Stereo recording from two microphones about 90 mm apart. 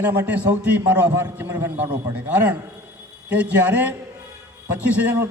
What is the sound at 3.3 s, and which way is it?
Speech, 15° right (ahead or behind).